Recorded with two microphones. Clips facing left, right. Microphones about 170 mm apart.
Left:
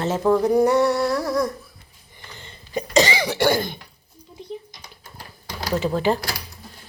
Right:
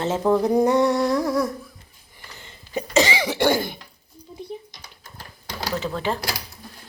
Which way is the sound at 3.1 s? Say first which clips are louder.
Even; 15° right (ahead or behind).